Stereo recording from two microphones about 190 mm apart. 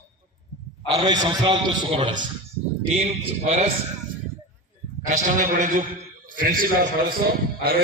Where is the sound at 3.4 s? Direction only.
35° right (ahead or behind).